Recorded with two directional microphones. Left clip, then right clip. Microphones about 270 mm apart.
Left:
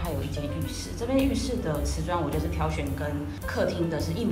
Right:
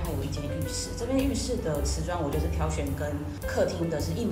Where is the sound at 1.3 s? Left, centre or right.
Right.